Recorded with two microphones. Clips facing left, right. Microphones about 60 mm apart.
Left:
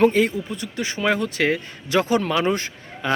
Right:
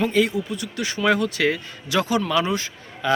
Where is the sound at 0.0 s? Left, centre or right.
Left.